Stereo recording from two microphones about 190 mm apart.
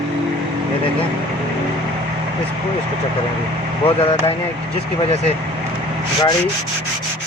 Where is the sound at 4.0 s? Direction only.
30° left (ahead or behind).